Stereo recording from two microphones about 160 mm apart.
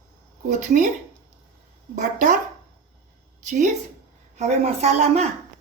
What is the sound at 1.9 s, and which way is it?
Speech, 50° right (ahead or behind).